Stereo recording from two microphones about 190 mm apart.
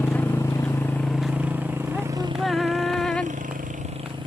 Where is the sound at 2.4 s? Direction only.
Centre (ahead or behind).